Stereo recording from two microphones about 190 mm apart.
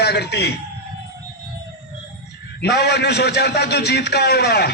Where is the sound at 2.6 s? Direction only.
60° left (ahead or behind).